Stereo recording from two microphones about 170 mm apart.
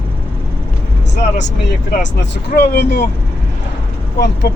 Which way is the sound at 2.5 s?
75° left (ahead or behind).